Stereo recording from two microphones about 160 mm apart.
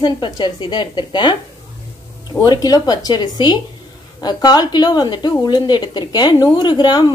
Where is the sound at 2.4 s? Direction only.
25° left (ahead or behind).